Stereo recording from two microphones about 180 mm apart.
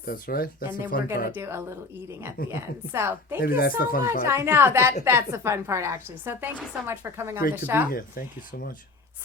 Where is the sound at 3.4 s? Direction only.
55° left (ahead or behind).